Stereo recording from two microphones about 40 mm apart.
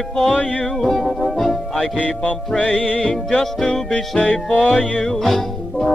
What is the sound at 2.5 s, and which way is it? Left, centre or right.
Speech, left.